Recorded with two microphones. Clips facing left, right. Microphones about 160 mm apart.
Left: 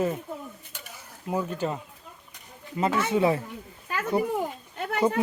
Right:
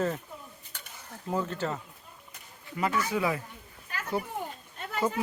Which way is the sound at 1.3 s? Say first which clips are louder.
Left 3 dB; 15° left (ahead or behind).